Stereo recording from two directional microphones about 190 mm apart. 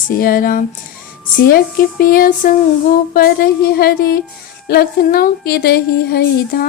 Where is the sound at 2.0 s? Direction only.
50° left (ahead or behind).